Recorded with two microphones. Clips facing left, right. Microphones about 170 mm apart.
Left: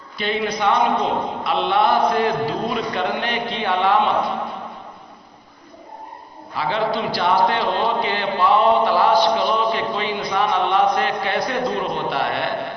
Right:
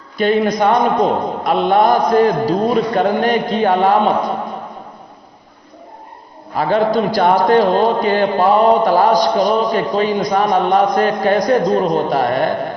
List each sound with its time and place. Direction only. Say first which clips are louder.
0.2 s a man's voice: right 8 dB; 45° right (ahead or behind)
6.5 s a man's voice: right 7 dB; 45° right (ahead or behind)